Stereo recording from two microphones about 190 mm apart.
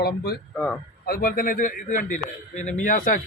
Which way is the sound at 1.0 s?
50° left (ahead or behind).